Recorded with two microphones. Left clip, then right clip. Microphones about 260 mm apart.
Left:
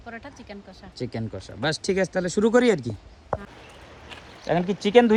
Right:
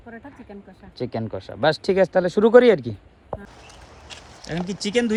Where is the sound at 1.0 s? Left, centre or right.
Centre.